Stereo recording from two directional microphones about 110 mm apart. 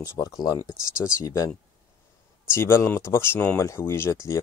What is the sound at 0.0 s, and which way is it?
Speech, 30° left (ahead or behind).